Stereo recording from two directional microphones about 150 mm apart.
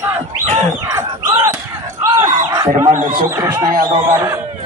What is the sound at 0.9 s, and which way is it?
Crowd, 25° right (ahead or behind).